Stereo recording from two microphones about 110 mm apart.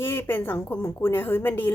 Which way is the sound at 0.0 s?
20° left (ahead or behind).